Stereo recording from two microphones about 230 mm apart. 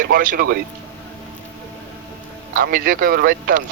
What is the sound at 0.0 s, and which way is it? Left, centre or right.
Speech, right.